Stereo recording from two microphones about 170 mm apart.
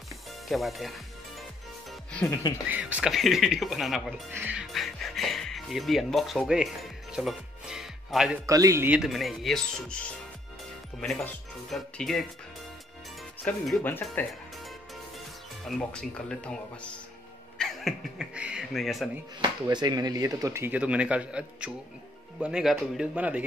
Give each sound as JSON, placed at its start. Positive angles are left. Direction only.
{"t": 0.5, "sound": "speech", "side_deg": 0}
{"t": 2.2, "sound": "speech", "side_deg": 20}
{"t": 2.7, "sound": "speech", "side_deg": -5}
{"t": 4.3, "sound": "music", "side_deg": -10}
{"t": 8.5, "sound": "speech", "side_deg": -20}
{"t": 11.7, "sound": "speech", "side_deg": 0}
{"t": 13.4, "sound": "speech", "side_deg": 5}
{"t": 15.6, "sound": "speech", "side_deg": 5}
{"t": 19.4, "sound": "speech", "side_deg": -25}